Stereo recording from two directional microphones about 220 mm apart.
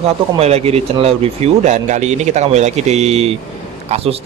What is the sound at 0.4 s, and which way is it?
Speech, 30° right (ahead or behind).